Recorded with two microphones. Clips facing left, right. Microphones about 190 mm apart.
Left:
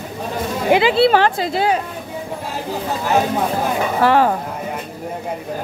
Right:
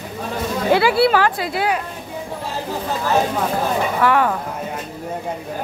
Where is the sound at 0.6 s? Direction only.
20° left (ahead or behind).